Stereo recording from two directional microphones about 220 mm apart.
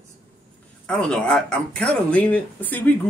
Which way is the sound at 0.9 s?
5° left (ahead or behind).